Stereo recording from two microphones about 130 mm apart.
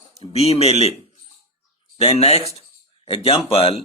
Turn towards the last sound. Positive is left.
turn(degrees=45)  # may be behind; listen again after turning